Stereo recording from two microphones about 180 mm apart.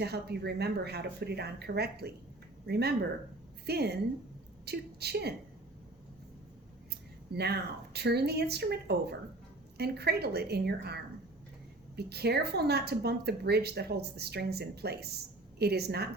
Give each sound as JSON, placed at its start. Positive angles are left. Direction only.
{"t": 0.0, "sound": "speech", "side_deg": -65}
{"t": 7.3, "sound": "speech", "side_deg": -65}